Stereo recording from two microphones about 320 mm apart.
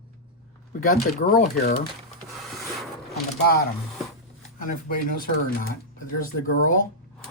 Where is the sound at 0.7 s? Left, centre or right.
Left.